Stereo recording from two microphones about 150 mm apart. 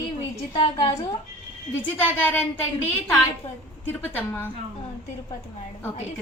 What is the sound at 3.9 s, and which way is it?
Speech, 15° left (ahead or behind).